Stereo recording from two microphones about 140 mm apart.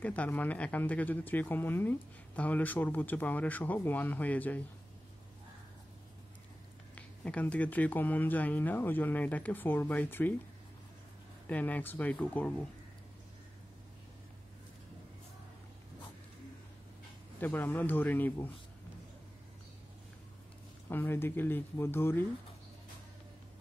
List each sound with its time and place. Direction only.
0.0 s speech: 10° left (ahead or behind)
7.0 s speech: 10° left (ahead or behind)
11.4 s speech: 10° left (ahead or behind)
17.4 s speech: 15° left (ahead or behind)
20.9 s speech: 15° left (ahead or behind)